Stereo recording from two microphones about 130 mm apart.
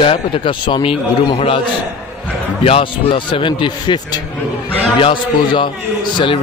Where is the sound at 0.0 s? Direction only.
40° left (ahead or behind).